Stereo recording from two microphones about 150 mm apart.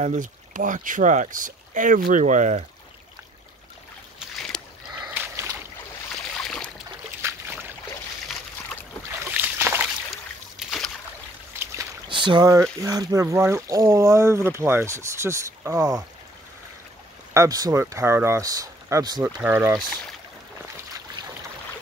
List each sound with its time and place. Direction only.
0.0 s speech: 55° right (ahead or behind)
4.5 s rowboat: 5° left (ahead or behind)
5.1 s rowboat: 10° right (ahead or behind)
6.3 s a sound: 5° left (ahead or behind)
7.2 s a sound: 15° right (ahead or behind)
9.2 s boat: 15° right (ahead or behind)
10.1 s a sound: centre (ahead or behind)
11.6 s boat: 20° right (ahead or behind)
12.1 s speech: 35° right (ahead or behind)
17.3 s speech: 20° right (ahead or behind)